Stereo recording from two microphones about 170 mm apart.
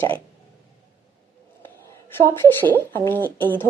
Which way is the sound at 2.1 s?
10° left (ahead or behind).